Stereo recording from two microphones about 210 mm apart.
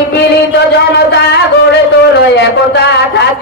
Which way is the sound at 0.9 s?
50° left (ahead or behind).